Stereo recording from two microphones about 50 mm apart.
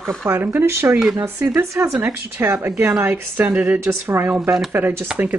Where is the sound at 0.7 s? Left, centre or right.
Right.